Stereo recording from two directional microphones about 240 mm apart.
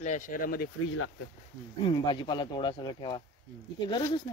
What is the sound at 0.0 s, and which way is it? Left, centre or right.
Speech, left.